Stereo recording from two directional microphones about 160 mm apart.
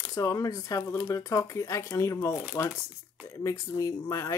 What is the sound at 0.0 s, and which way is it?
Speech, 20° left (ahead or behind).